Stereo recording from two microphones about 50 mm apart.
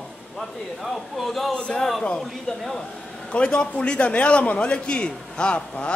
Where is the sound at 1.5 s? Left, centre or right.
Centre.